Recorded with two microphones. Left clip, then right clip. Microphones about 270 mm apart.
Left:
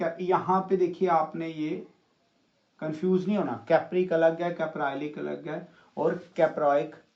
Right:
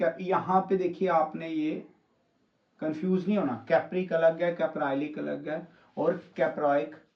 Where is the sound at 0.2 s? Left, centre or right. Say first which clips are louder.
Left 1 dB; centre.